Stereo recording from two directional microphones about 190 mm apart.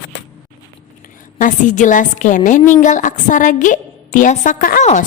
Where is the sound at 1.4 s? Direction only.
40° left (ahead or behind).